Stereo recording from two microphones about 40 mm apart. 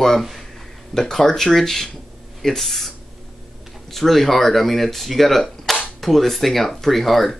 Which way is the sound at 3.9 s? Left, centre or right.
Centre.